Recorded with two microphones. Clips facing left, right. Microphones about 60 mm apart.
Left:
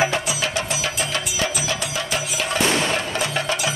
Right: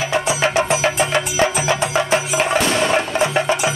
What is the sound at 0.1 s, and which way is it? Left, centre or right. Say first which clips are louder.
Music: right 6 dB; right.